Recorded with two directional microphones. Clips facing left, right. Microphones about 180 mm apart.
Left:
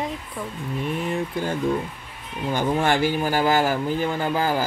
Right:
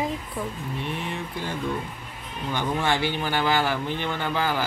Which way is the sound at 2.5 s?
45° left (ahead or behind).